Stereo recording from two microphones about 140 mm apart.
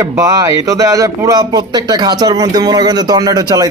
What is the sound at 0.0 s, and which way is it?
A man's voice, 25° right (ahead or behind).